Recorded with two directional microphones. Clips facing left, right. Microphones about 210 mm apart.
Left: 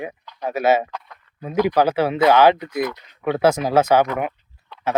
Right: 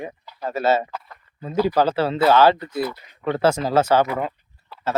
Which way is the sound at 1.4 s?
15° left (ahead or behind).